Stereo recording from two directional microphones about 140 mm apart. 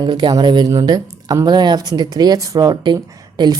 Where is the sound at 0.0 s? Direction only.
35° right (ahead or behind).